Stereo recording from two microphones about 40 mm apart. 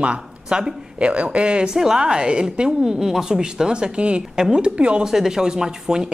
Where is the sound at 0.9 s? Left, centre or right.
Right.